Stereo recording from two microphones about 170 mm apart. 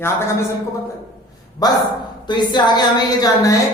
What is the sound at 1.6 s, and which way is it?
A woman's voice, 25° left (ahead or behind).